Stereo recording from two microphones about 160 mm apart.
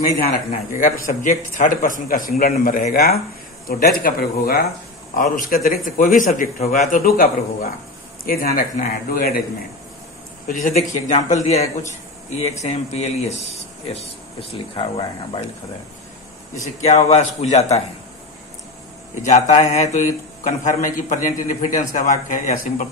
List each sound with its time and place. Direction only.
0.0 s a man's voice: 60° left (ahead or behind)
8.3 s a man's voice: 65° left (ahead or behind)
10.5 s speech: 55° left (ahead or behind)
14.5 s speech: 35° left (ahead or behind)
16.5 s speech: 50° left (ahead or behind)
19.2 s a man's voice: 45° left (ahead or behind)